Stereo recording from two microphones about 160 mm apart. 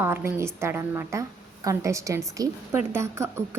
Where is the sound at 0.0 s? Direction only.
15° right (ahead or behind).